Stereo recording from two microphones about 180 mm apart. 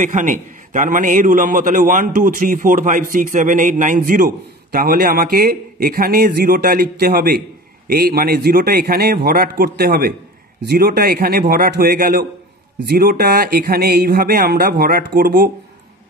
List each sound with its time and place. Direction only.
0.0 s a man's voice: 45° right (ahead or behind)